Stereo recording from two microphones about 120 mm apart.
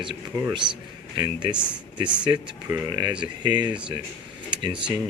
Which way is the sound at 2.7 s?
30° right (ahead or behind).